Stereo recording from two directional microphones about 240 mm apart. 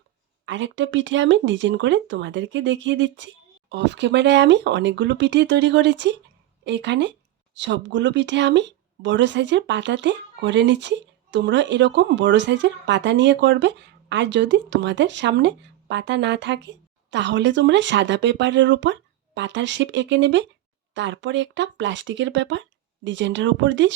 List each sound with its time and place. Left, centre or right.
0.4 s speech: right